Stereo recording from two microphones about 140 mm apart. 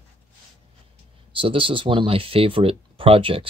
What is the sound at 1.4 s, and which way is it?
Speech, 40° right (ahead or behind).